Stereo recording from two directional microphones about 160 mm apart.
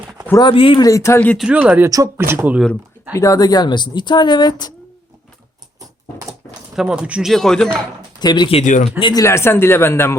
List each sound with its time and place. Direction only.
0.3 s speech: 25° left (ahead or behind)
0.5 s speech: 35° left (ahead or behind); by 1.4 s 15° left (ahead or behind)
1.4 s speech: 5° right (ahead or behind)
3.2 s speech: 20° left (ahead or behind)
6.7 s speech: 5° right (ahead or behind)
8.2 s speech: 25° left (ahead or behind)
8.6 s speech: 50° left (ahead or behind)
9.0 s speech: 30° left (ahead or behind)
9.2 s speech: 15° left (ahead or behind)